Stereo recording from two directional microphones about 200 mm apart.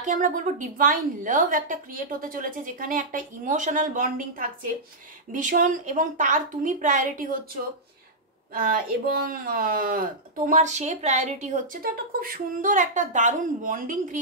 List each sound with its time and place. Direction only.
0.0 s a woman's voice: 40° right (ahead or behind)
8.5 s speech: 45° right (ahead or behind)